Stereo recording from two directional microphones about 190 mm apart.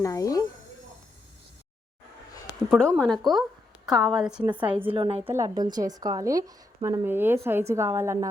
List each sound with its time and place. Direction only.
0.0 s speech: 15° left (ahead or behind)
2.6 s a woman's voice: 5° left (ahead or behind)
4.9 s a woman's voice: 30° right (ahead or behind)
5.3 s a woman's voice: 20° right (ahead or behind)